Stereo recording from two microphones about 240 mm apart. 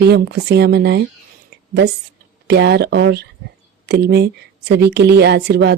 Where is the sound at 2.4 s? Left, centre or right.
Right.